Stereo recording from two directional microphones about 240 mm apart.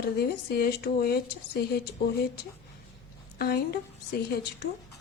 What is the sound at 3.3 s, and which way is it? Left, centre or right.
A woman's voice, left.